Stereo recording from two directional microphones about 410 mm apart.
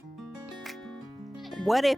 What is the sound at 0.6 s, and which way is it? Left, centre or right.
Music, centre.